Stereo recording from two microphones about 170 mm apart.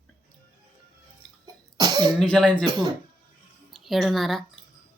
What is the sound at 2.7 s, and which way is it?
Speech, 25° right (ahead or behind).